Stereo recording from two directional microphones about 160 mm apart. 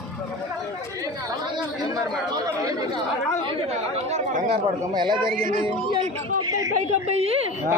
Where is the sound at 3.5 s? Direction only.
40° right (ahead or behind).